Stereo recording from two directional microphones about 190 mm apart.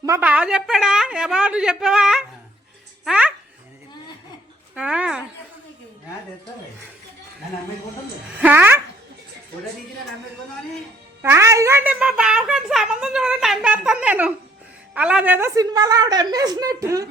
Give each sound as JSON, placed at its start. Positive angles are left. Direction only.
{"t": 0.0, "sound": "a child's voice", "side_deg": -10}
{"t": 4.7, "sound": "a child's voice", "side_deg": -5}
{"t": 8.4, "sound": "speech", "side_deg": -10}
{"t": 11.2, "sound": "a child's voice", "side_deg": -15}